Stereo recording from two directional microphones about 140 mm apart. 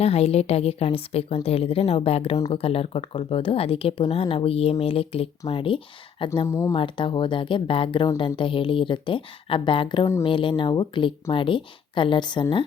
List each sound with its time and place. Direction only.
0.0 s speech: 45° left (ahead or behind)
6.5 s speech: 20° left (ahead or behind)
6.7 s speech: 35° left (ahead or behind)